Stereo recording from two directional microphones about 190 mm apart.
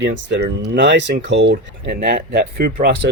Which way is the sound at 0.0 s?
65° right (ahead or behind).